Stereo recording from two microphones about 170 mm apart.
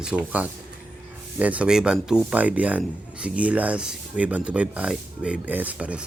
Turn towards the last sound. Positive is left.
turn(degrees=-5)  # may be behind; listen again after turning